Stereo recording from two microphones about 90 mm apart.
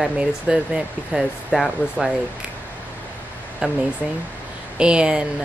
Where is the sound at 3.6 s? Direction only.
10° right (ahead or behind).